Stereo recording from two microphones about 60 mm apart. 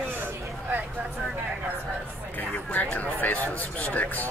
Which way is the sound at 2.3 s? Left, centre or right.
Left.